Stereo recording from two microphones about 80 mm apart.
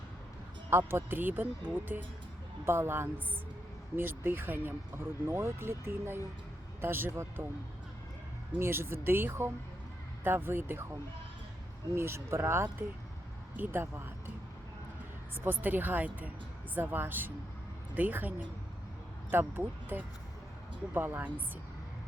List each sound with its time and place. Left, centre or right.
0.7 s speech: right
8.5 s speech: right
11.9 s speech: right
15.4 s speech: right